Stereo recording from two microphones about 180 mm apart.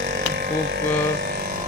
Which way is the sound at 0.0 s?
65° right (ahead or behind).